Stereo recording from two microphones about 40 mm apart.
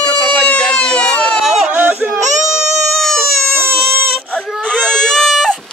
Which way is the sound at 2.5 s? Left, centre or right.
Centre.